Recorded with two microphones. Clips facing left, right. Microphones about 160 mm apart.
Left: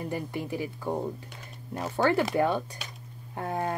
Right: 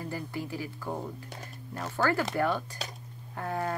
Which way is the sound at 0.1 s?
20° left (ahead or behind).